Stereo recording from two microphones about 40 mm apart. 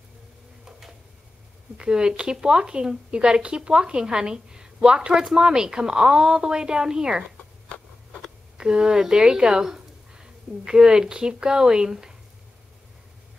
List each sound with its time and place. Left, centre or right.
0.7 s a sound: centre
1.8 s a woman's voice: centre
8.5 s a woman's voice: centre